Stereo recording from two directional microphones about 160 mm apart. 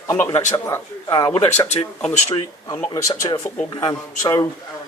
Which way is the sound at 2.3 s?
25° left (ahead or behind).